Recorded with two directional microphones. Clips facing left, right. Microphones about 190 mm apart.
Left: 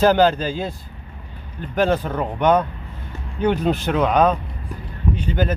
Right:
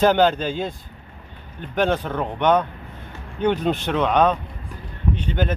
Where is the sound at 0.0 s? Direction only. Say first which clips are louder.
Left 1 dB; centre (ahead or behind).